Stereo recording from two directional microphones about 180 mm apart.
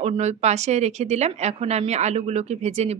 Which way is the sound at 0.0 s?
40° right (ahead or behind).